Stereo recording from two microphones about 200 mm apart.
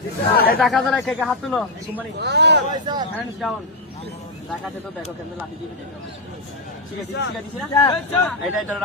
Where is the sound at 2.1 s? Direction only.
55° right (ahead or behind).